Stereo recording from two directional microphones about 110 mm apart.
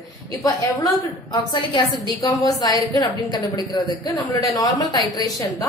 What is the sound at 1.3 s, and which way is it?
A woman's voice, 40° left (ahead or behind).